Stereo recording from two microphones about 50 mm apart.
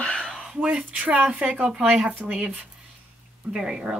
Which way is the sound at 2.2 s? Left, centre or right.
Centre.